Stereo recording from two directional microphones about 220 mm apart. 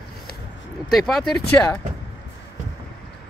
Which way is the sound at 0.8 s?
Centre (ahead or behind).